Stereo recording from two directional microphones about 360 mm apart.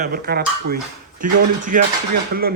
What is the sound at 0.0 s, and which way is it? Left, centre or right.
A man's voice, right.